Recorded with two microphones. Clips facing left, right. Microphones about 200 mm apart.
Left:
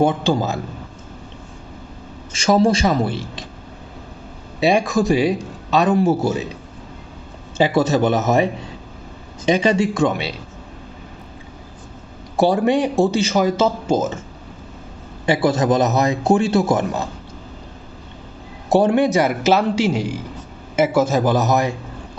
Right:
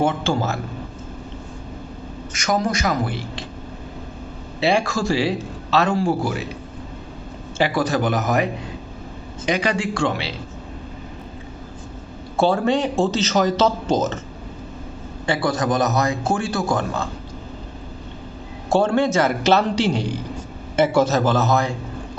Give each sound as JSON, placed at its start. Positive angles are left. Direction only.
{"t": 0.0, "sound": "speech", "side_deg": 15}
{"t": 2.3, "sound": "a man's voice", "side_deg": 30}
{"t": 4.6, "sound": "a man's voice", "side_deg": 20}
{"t": 7.6, "sound": "a man's voice", "side_deg": 25}
{"t": 9.5, "sound": "a man's voice", "side_deg": 25}
{"t": 12.4, "sound": "speech", "side_deg": 15}
{"t": 15.3, "sound": "a man's voice", "side_deg": 25}
{"t": 18.7, "sound": "speech", "side_deg": 15}